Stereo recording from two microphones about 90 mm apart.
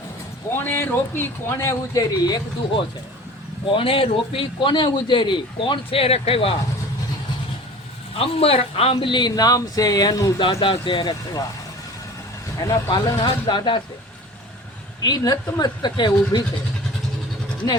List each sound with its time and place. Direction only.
0.5 s speech: 25° left (ahead or behind)
2.0 s speech: 45° left (ahead or behind)
3.7 s a man's voice: 75° left (ahead or behind)
8.1 s speech: 90° left; by 10.4 s 45° left (ahead or behind)
10.4 s a man's voice: 70° left (ahead or behind)
12.9 s speech: 55° left (ahead or behind)
15.0 s speech: 45° left (ahead or behind)